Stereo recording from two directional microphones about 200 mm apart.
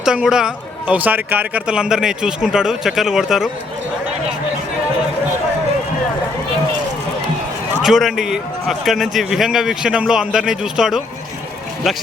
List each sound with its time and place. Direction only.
0.0 s a man's voice: 5° right (ahead or behind)
7.8 s a man's voice: centre (ahead or behind)